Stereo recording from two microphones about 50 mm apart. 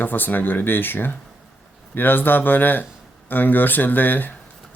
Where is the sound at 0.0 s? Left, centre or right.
Left.